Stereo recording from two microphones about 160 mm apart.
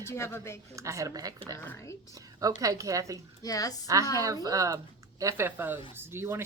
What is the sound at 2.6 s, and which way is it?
Speech, 20° right (ahead or behind).